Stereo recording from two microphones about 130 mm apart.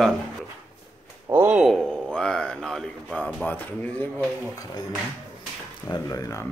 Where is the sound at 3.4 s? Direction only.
15° left (ahead or behind).